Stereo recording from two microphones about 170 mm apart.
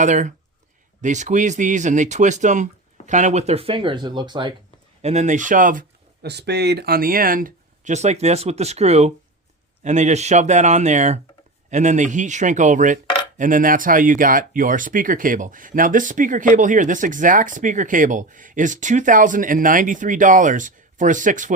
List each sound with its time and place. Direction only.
0.0 s speech: 45° right (ahead or behind); by 4.5 s 25° right (ahead or behind)
5.0 s speech: 45° right (ahead or behind)
6.2 s speech: 80° right; by 21.5 s 50° right (ahead or behind)